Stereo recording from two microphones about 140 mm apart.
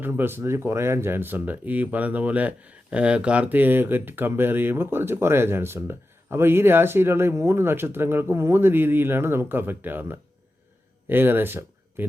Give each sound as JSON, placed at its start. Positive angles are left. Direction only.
{"t": 0.0, "sound": "speech", "side_deg": -15}